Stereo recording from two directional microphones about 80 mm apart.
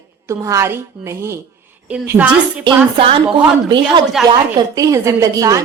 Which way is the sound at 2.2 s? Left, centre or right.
Right.